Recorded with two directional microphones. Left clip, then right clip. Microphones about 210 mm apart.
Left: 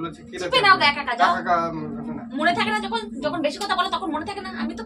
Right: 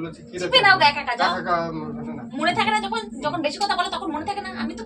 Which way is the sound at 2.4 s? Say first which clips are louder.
Right 1 dB; 20° left (ahead or behind).